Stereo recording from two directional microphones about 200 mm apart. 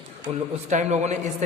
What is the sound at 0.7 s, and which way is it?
Speech, 35° right (ahead or behind).